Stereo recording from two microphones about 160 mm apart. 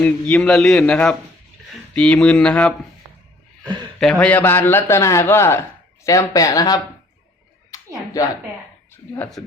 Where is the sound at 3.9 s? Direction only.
5° left (ahead or behind); by 6.8 s 25° left (ahead or behind).